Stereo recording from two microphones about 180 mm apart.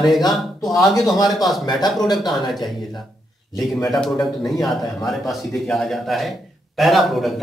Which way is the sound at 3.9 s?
Centre (ahead or behind).